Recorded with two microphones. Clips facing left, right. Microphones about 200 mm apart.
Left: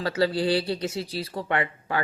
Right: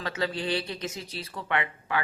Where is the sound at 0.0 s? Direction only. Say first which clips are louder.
Left 7 dB; 35° left (ahead or behind).